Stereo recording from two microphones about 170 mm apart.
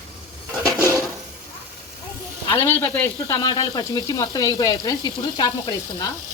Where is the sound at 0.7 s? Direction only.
15° right (ahead or behind).